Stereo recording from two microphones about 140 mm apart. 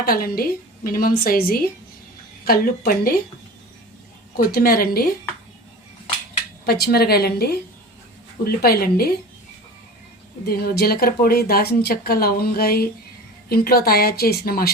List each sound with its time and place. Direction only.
0.0 s speech: 90° left
4.4 s speech: 90° left
6.7 s speech: 90° left
10.5 s speech: 90° left